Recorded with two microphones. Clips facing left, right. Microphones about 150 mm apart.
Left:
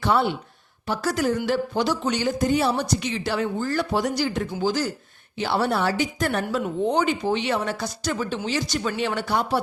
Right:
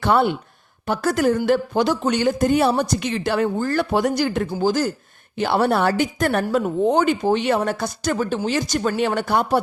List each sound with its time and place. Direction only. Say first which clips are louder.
0.0 s speech: right 4 dB; 55° right (ahead or behind)